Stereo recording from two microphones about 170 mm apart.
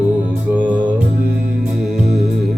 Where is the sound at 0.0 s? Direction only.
10° right (ahead or behind).